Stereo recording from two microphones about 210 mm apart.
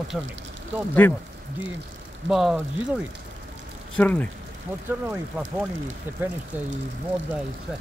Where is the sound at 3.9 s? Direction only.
5° left (ahead or behind).